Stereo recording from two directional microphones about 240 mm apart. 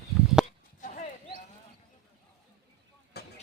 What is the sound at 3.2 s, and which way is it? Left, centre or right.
Vehicle, left.